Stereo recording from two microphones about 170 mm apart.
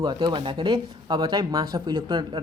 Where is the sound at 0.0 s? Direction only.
25° right (ahead or behind).